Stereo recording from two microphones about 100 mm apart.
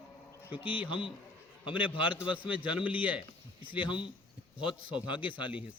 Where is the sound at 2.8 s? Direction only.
15° right (ahead or behind).